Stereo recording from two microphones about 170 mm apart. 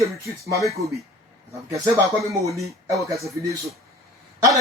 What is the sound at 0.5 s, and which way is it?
Speech, 20° right (ahead or behind).